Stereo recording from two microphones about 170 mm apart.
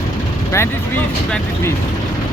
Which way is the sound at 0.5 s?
10° left (ahead or behind).